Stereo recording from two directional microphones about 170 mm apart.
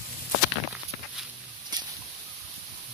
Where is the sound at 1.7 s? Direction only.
25° right (ahead or behind).